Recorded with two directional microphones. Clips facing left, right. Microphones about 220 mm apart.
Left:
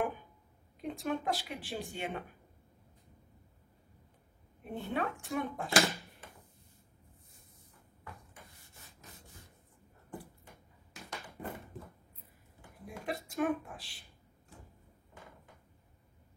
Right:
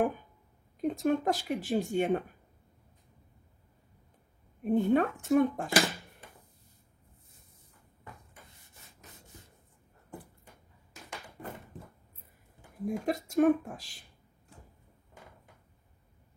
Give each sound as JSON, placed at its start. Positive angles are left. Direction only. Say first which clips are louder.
{"t": 0.9, "sound": "speech", "louder": "right 6 dB", "side_deg": -45}
{"t": 4.6, "sound": "speech", "louder": "right 11 dB", "side_deg": -45}
{"t": 12.8, "sound": "speech", "louder": "right 9 dB", "side_deg": -45}